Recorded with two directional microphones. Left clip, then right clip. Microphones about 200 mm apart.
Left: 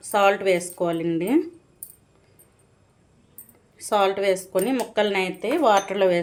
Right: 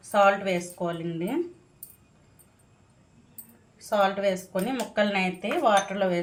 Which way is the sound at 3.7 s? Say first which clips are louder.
Left 3 dB; 55° left (ahead or behind).